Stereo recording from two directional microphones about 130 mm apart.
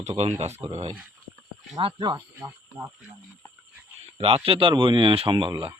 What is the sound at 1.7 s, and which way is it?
Speech, 35° right (ahead or behind).